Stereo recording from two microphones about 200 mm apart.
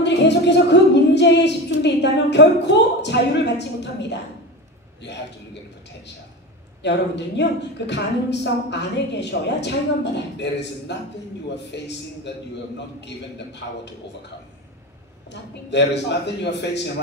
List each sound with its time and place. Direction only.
0.0 s music: 60° left (ahead or behind)
3.0 s a woman's voice: 60° left (ahead or behind)
6.8 s a woman's voice: 60° left (ahead or behind)
15.7 s a woman's voice: 60° left (ahead or behind)